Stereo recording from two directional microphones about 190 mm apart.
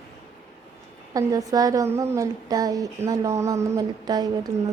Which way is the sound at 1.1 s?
20° right (ahead or behind).